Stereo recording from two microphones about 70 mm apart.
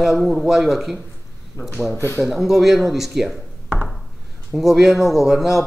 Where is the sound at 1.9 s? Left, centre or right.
Left.